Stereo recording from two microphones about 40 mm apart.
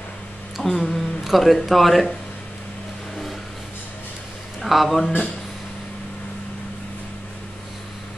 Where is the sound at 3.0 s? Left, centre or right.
Centre.